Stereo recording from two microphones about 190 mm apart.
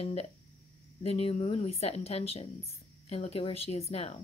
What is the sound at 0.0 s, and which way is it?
A woman's voice, 35° left (ahead or behind).